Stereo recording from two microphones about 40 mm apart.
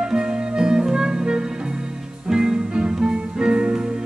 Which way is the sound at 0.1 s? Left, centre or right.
Centre.